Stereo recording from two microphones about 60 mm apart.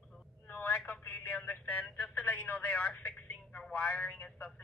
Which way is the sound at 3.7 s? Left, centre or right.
Left.